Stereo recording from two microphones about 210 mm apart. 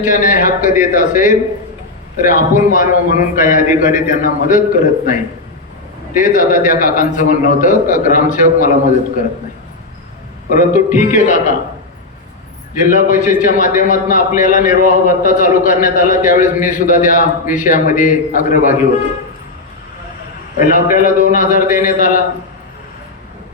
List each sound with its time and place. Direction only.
0.0 s a man's voice: 35° left (ahead or behind)
6.1 s a man's voice: 40° left (ahead or behind)
10.5 s a man's voice: 40° left (ahead or behind)
12.8 s a man's voice: 40° left (ahead or behind)
20.6 s a man's voice: 40° left (ahead or behind)